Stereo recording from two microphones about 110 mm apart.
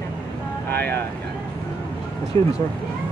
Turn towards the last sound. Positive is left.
turn(degrees=30)  # may be behind; listen again after turning